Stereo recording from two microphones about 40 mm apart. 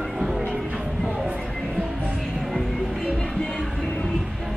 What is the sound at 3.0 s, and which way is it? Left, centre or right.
Music, centre.